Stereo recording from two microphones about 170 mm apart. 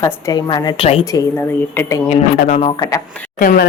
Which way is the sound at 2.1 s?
40° left (ahead or behind).